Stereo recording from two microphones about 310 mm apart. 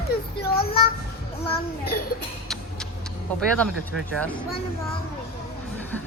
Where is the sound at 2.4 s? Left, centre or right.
Centre.